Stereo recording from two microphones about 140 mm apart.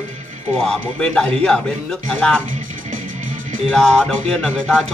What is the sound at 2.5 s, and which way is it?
Music, 70° right (ahead or behind).